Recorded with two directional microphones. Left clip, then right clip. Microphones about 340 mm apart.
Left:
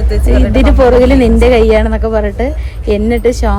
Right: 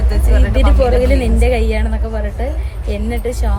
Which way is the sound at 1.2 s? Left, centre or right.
Left.